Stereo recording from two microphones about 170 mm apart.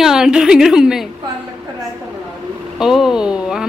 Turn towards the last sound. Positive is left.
turn(degrees=-5)  # may be behind; listen again after turning